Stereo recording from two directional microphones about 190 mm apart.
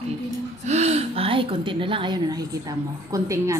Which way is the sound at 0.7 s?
35° right (ahead or behind).